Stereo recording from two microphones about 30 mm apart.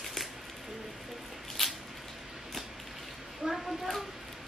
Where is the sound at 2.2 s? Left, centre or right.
Centre.